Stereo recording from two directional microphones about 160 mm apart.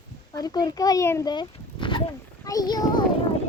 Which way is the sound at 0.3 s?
25° left (ahead or behind).